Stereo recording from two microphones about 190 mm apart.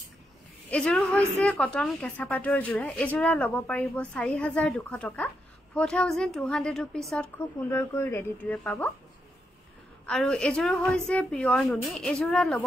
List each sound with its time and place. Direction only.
0.7 s a woman's voice: 5° left (ahead or behind)
7.7 s a woman's voice: 15° left (ahead or behind)
10.0 s a woman's voice: 5° left (ahead or behind)